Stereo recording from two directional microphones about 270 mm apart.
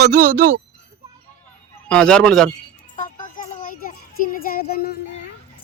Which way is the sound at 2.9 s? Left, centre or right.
Left.